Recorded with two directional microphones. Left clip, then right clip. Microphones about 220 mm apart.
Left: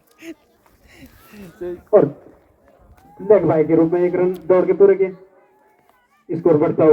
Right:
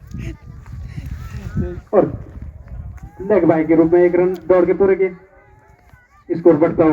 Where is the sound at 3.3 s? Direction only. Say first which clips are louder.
Even; 40° right (ahead or behind).